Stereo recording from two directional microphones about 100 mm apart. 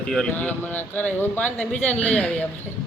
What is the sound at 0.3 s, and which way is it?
Speech, 15° left (ahead or behind).